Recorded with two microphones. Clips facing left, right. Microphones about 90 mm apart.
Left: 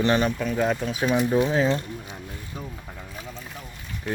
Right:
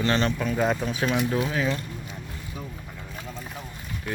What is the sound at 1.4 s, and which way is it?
Speech, 30° left (ahead or behind).